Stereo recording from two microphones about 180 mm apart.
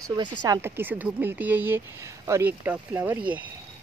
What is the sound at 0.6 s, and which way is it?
Speech, 10° right (ahead or behind).